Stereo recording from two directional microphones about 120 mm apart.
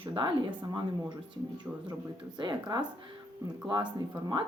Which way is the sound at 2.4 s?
40° right (ahead or behind).